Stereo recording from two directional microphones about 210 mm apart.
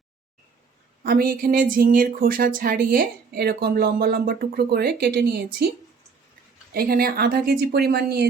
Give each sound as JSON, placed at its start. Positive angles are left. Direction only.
{"t": 1.0, "sound": "speech", "side_deg": -45}
{"t": 6.7, "sound": "speech", "side_deg": -45}